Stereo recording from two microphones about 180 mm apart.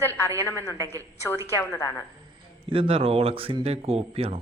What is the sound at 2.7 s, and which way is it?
Speech, 30° right (ahead or behind).